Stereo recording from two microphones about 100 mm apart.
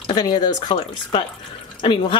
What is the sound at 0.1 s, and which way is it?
Speech, 45° left (ahead or behind).